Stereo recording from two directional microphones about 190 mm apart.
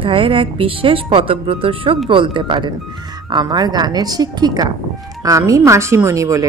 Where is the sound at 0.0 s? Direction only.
25° right (ahead or behind).